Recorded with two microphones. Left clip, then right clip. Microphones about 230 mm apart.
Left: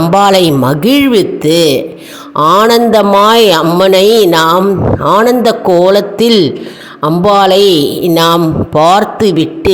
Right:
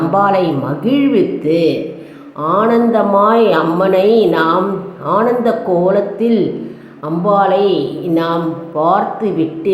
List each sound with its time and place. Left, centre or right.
0.1 s a woman's voice: left